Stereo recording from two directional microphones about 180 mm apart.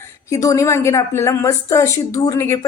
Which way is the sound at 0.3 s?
15° left (ahead or behind).